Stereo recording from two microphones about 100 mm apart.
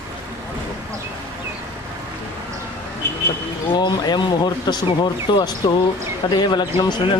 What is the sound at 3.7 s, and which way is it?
Basketball bounce, 50° left (ahead or behind).